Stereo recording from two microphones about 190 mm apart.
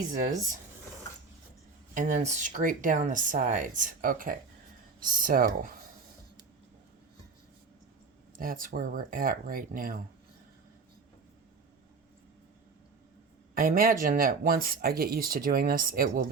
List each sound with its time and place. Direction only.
2.0 s speech: 40° right (ahead or behind)
8.4 s speech: 45° right (ahead or behind)
13.5 s speech: 45° right (ahead or behind)